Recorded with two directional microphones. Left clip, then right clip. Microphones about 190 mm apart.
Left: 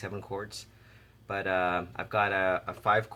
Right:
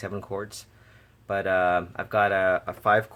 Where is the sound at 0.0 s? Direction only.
45° right (ahead or behind).